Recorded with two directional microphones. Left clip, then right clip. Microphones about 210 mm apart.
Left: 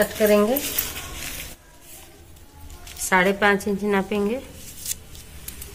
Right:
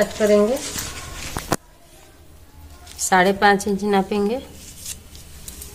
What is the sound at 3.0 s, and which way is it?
A woman's voice, 40° right (ahead or behind).